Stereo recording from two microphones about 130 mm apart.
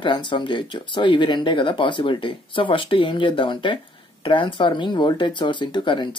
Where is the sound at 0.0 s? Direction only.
35° left (ahead or behind).